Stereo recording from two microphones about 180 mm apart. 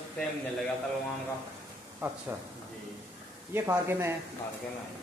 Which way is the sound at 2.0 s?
15° right (ahead or behind).